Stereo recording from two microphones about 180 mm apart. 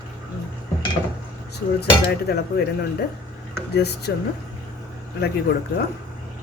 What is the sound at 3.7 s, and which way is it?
Speech, 65° left (ahead or behind).